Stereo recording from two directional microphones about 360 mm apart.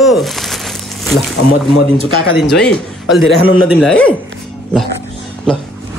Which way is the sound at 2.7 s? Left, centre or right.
Centre.